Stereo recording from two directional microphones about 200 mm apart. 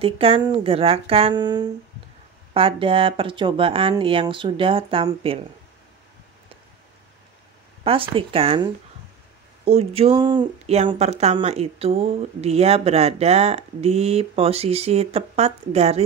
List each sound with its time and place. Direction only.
0.0 s speech: 30° right (ahead or behind)
7.8 s speech: 25° right (ahead or behind)
9.7 s speech: 30° right (ahead or behind)